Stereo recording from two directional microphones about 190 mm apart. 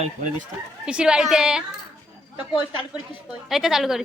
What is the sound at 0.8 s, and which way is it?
Speech, 5° right (ahead or behind).